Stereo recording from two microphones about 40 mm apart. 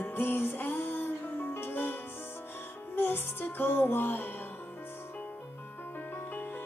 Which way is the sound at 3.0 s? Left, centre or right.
Left.